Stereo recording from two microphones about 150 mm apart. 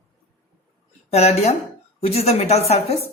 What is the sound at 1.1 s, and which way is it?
A woman's voice, 45° left (ahead or behind).